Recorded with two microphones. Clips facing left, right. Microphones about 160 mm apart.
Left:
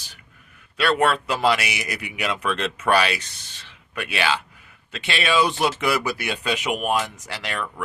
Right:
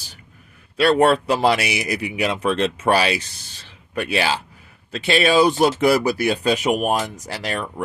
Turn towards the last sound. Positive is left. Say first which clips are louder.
# right 4 dB
turn(degrees=-35)  # may be behind; listen again after turning